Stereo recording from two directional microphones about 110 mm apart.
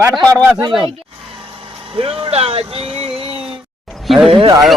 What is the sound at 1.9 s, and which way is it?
Speech, 60° right (ahead or behind).